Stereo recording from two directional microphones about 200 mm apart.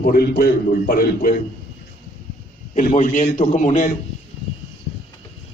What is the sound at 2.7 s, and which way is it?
A man's voice, 40° left (ahead or behind).